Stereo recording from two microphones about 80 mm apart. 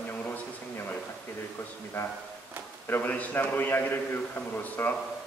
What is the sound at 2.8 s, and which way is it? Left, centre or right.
A man's voice, left.